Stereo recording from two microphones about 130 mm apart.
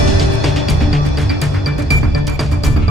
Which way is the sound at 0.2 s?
Centre (ahead or behind).